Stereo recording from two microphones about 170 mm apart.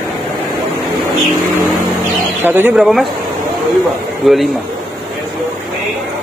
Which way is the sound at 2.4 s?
10° right (ahead or behind).